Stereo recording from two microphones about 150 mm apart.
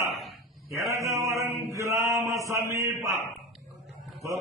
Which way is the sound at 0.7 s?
20° right (ahead or behind).